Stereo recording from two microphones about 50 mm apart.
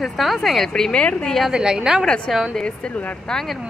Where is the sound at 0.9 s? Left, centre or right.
Left.